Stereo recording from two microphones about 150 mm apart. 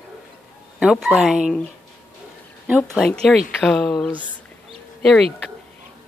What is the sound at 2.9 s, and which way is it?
Speech, 5° left (ahead or behind).